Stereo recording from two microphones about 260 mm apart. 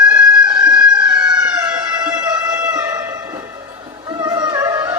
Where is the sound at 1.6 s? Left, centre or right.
Centre.